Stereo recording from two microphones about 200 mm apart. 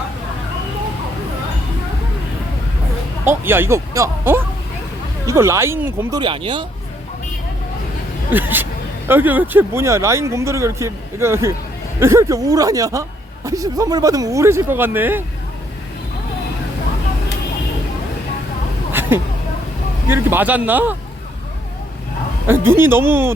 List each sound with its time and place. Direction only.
3.2 s speech: 10° right (ahead or behind)
8.3 s speech: 10° right (ahead or behind)
18.9 s vehicle: 10° right (ahead or behind)
20.1 s speech: 10° right (ahead or behind)
22.4 s speech: 10° right (ahead or behind)